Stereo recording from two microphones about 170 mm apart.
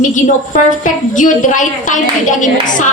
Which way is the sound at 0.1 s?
45° left (ahead or behind).